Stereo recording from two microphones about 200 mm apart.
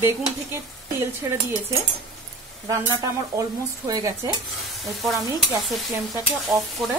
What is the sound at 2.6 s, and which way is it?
Speech, 15° right (ahead or behind).